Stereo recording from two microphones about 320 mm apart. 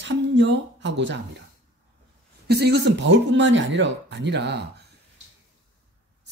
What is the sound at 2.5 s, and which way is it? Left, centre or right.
Speech, right.